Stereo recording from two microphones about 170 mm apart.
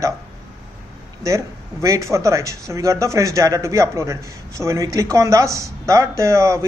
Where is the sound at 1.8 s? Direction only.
20° right (ahead or behind).